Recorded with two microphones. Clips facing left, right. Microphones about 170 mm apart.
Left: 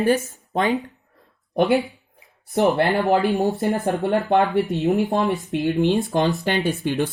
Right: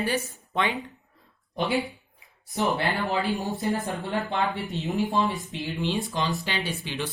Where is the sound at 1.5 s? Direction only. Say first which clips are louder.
Left 8 dB; 55° left (ahead or behind).